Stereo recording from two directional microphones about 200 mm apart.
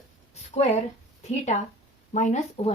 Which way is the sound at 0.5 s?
35° left (ahead or behind).